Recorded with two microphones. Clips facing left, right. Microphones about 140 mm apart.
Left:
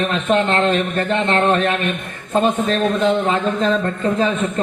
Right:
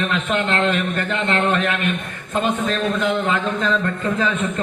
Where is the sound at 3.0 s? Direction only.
35° left (ahead or behind).